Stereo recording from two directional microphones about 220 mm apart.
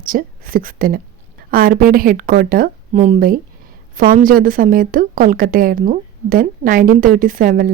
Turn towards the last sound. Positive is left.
turn(degrees=-40)  # may be behind; listen again after turning